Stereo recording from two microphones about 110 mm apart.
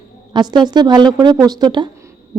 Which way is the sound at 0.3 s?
40° right (ahead or behind).